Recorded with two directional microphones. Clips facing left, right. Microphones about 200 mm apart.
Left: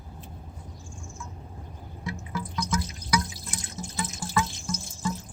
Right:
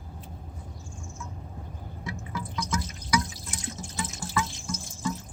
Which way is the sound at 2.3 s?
40° left (ahead or behind).